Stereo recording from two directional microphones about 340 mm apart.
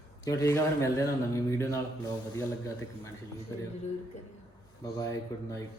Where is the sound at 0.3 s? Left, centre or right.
Centre.